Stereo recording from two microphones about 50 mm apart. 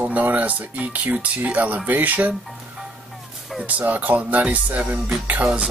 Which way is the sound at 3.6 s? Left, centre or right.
Right.